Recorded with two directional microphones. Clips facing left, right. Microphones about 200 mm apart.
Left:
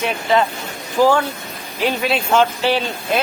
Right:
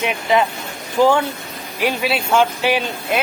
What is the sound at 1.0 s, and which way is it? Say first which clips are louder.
Speech: even; 20° right (ahead or behind).